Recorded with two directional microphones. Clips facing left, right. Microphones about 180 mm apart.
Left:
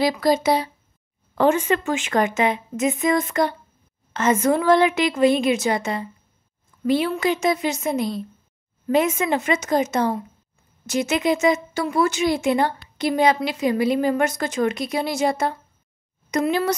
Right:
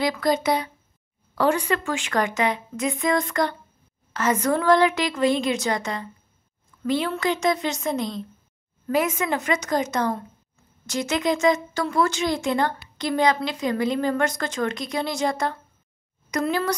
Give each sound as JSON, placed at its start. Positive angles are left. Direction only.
{"t": 0.2, "sound": "a woman's voice", "side_deg": 25}